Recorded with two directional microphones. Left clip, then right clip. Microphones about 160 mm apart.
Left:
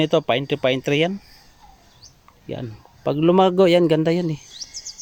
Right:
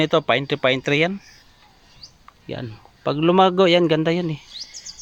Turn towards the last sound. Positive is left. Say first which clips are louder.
# left 1 dB
turn(degrees=25)  # may be behind; listen again after turning